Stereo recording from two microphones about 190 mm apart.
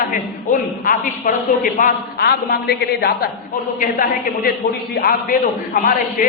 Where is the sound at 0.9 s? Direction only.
45° left (ahead or behind).